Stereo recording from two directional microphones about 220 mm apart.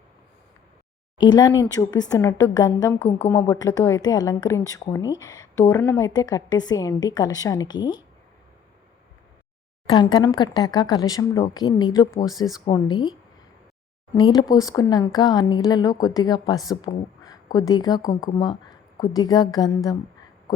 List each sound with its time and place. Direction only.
1.2 s a woman's voice: 20° left (ahead or behind)
9.8 s a woman's voice: 20° left (ahead or behind)
14.2 s a woman's voice: 20° left (ahead or behind)